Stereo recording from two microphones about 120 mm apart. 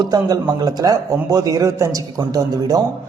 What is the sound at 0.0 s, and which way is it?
A man's voice, 35° right (ahead or behind).